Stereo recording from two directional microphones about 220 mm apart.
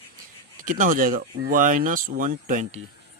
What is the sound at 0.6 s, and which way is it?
Speech, 35° right (ahead or behind).